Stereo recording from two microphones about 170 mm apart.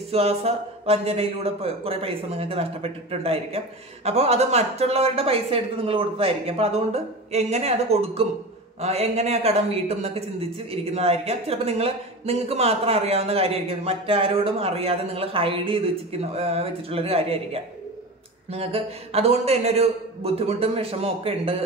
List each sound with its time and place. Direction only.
0.1 s speech: 35° right (ahead or behind)